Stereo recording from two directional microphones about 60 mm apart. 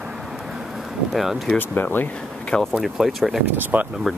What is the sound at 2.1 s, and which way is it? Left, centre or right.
Speech, centre.